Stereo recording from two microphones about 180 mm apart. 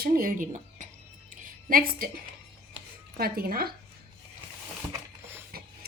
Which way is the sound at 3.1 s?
55° right (ahead or behind).